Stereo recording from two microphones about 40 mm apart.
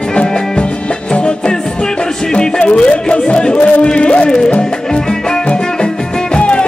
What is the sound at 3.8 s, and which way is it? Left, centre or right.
Music, left.